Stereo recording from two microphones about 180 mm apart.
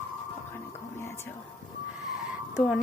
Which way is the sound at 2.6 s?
Centre (ahead or behind).